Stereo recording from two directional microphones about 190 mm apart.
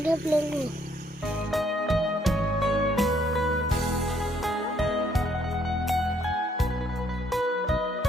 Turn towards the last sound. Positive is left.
turn(degrees=0)  # may be behind; listen again after turning